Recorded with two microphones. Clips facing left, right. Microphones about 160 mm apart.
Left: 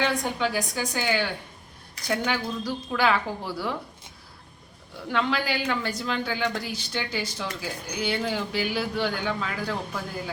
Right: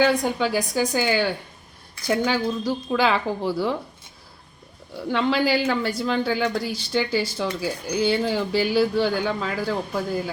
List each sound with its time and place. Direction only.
0.0 s a woman's voice: 35° right (ahead or behind)
4.9 s speech: 30° right (ahead or behind)